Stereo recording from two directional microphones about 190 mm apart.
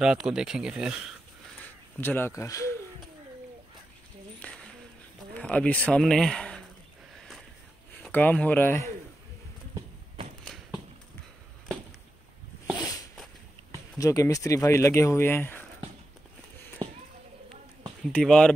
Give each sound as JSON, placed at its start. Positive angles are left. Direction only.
{"t": 0.0, "sound": "speech", "side_deg": -5}
{"t": 1.6, "sound": "speech", "side_deg": 10}
{"t": 4.4, "sound": "a sound", "side_deg": 5}
{"t": 5.3, "sound": "speech", "side_deg": 5}
{"t": 7.9, "sound": "speech", "side_deg": 10}
{"t": 10.4, "sound": "clip-clop", "side_deg": 0}
{"t": 12.7, "sound": "a sound", "side_deg": 20}
{"t": 13.9, "sound": "speech", "side_deg": 15}
{"t": 16.8, "sound": "a sound", "side_deg": -20}
{"t": 18.1, "sound": "speech", "side_deg": 5}